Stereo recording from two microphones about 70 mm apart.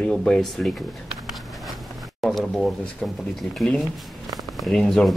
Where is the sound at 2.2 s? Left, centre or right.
Centre.